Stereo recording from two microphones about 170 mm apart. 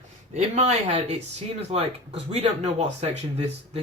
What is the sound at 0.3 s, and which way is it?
Speech, 40° right (ahead or behind).